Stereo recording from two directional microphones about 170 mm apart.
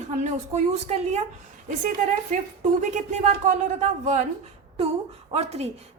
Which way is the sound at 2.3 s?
45° right (ahead or behind).